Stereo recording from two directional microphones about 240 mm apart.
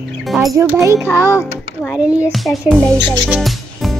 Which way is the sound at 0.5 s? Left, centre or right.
Centre.